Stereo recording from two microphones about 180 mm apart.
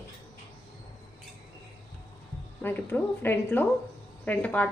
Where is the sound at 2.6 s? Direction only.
10° left (ahead or behind).